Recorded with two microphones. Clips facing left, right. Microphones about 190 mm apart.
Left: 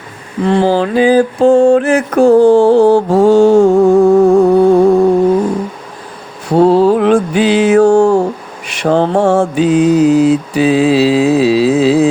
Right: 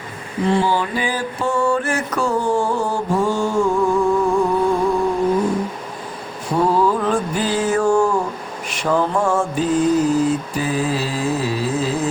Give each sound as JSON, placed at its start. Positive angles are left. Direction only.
{"t": 0.5, "sound": "mantra", "side_deg": 90}
{"t": 2.0, "sound": "mantra", "side_deg": 60}
{"t": 3.8, "sound": "music", "side_deg": 45}
{"t": 4.2, "sound": "music", "side_deg": 70}
{"t": 6.5, "sound": "mantra", "side_deg": 70}